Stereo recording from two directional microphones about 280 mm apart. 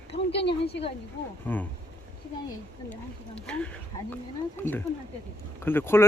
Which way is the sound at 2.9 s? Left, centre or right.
Centre.